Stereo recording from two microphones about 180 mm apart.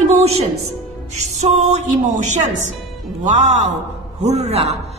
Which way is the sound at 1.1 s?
40° right (ahead or behind).